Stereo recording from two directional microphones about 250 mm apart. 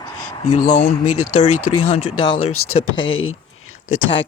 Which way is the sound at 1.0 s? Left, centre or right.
Left.